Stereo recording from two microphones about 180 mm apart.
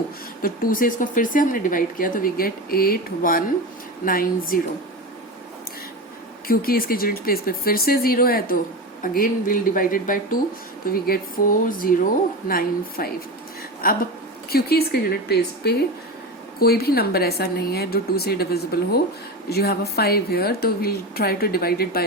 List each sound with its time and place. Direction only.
0.4 s speech: 50° left (ahead or behind)
6.5 s a woman's voice: 55° left (ahead or behind)